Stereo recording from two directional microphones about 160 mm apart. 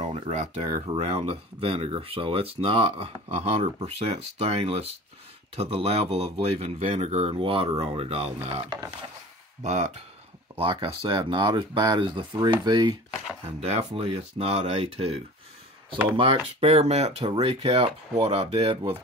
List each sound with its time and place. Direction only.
0.0 s speech: 45° right (ahead or behind)
10.6 s speech: 30° right (ahead or behind)
13.6 s speech: 40° right (ahead or behind)
16.2 s speech: 35° right (ahead or behind)